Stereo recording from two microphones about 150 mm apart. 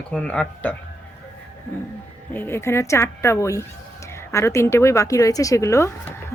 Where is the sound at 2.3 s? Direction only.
15° left (ahead or behind).